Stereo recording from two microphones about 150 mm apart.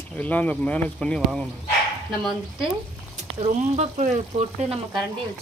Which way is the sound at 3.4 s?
45° right (ahead or behind).